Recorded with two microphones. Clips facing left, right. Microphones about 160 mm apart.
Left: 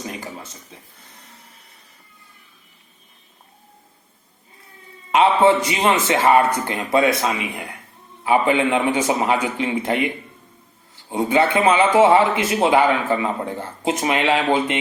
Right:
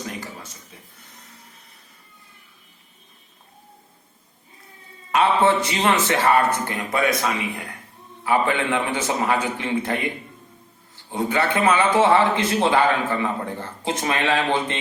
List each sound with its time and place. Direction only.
5.1 s a man's voice: 15° left (ahead or behind)
11.1 s a man's voice: 20° left (ahead or behind)